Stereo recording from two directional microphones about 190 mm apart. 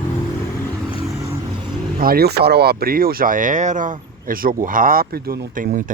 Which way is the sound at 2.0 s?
55° right (ahead or behind).